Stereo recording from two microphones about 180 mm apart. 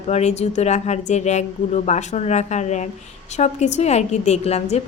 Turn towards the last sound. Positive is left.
turn(degrees=35)  # may be behind; listen again after turning